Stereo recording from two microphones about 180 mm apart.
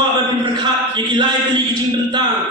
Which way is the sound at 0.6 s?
25° right (ahead or behind).